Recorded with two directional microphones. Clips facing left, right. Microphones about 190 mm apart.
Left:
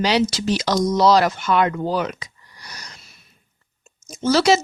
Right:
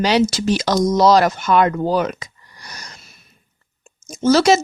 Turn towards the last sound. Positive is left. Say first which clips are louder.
# right 3 dB
turn(degrees=-45)  # may be behind; listen again after turning